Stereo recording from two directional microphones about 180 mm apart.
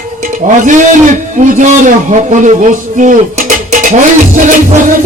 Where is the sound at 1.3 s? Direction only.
45° right (ahead or behind).